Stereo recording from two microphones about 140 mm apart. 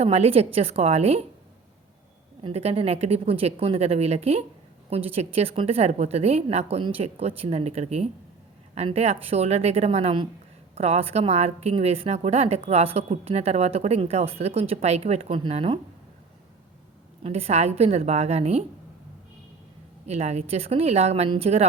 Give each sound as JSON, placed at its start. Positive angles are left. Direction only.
{"t": 0.0, "sound": "a woman's voice", "side_deg": -45}
{"t": 2.4, "sound": "a woman's voice", "side_deg": -45}
{"t": 17.2, "sound": "a woman's voice", "side_deg": -45}
{"t": 20.1, "sound": "a woman's voice", "side_deg": -50}